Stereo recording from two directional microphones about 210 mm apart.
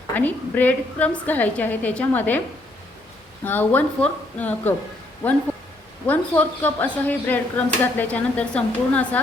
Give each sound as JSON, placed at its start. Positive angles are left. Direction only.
{"t": 0.1, "sound": "speech", "side_deg": 10}
{"t": 3.4, "sound": "speech", "side_deg": 10}
{"t": 6.1, "sound": "speech", "side_deg": 10}